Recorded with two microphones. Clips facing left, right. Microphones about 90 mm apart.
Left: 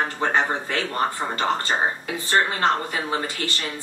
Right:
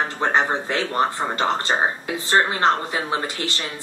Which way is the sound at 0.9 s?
20° right (ahead or behind).